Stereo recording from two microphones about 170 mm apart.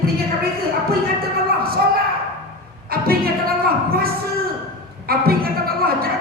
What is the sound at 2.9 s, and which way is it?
Speech, 60° right (ahead or behind).